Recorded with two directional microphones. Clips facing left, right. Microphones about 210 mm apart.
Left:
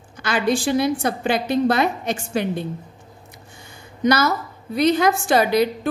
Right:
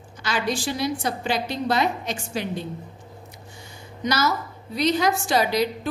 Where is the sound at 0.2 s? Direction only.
55° left (ahead or behind).